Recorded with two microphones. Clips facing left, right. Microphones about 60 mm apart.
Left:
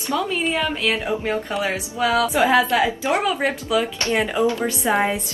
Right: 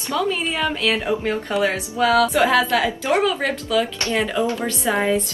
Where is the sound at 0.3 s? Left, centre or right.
Centre.